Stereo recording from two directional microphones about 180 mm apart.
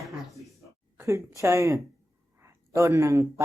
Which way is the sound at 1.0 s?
15° right (ahead or behind).